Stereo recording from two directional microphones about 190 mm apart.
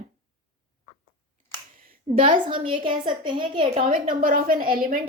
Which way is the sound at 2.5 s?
25° right (ahead or behind).